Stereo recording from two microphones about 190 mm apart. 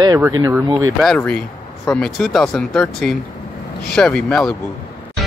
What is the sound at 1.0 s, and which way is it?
Speech, 5° left (ahead or behind).